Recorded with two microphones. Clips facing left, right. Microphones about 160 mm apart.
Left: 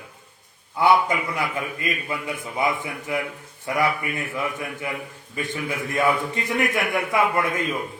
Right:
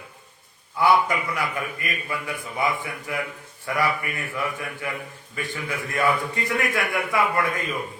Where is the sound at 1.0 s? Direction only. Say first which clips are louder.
Left 1 dB; 25° left (ahead or behind).